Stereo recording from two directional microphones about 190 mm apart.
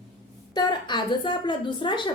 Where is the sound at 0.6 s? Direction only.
25° left (ahead or behind).